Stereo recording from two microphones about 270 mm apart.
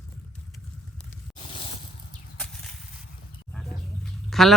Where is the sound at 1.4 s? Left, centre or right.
Centre.